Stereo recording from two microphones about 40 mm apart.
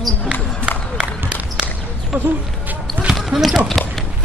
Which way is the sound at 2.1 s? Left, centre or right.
Right.